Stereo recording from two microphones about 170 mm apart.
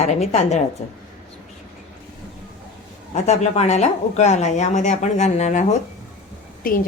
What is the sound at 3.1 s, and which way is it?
Speech, 40° left (ahead or behind).